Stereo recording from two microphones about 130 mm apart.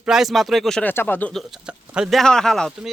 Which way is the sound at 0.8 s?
15° left (ahead or behind).